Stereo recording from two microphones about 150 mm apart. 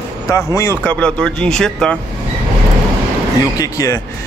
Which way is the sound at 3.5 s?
25° left (ahead or behind).